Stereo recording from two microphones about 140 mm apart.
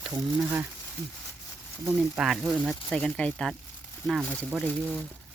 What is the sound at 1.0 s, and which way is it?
Speech, 20° left (ahead or behind).